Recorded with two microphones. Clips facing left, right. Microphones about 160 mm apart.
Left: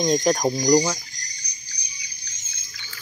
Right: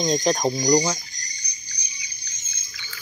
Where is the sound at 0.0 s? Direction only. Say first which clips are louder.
Left 1 dB; 10° left (ahead or behind).